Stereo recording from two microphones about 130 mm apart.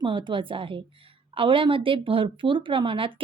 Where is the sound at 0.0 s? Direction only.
40° right (ahead or behind).